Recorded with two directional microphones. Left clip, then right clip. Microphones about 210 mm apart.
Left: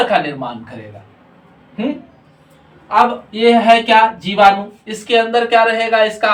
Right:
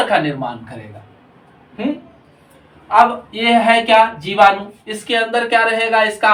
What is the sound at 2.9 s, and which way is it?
Speech, 20° left (ahead or behind).